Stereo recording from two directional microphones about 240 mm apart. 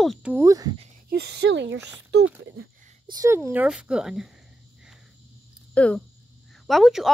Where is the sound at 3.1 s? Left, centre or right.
Centre.